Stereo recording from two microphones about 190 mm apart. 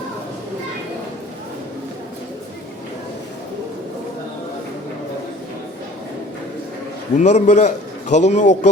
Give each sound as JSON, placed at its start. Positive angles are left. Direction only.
{"t": 7.2, "sound": "a man's voice", "side_deg": 40}